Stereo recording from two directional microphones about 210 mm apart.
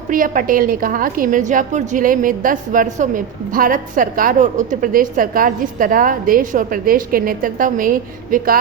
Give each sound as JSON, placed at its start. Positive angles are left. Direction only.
{"t": 0.1, "sound": "a woman's voice", "side_deg": -40}